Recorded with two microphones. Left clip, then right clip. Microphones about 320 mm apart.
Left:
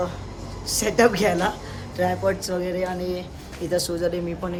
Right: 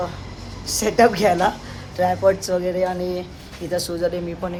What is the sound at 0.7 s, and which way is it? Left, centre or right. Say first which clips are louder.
Speech: right 3 dB; centre.